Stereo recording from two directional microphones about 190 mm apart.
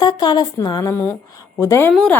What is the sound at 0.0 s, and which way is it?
A woman's voice, 20° left (ahead or behind).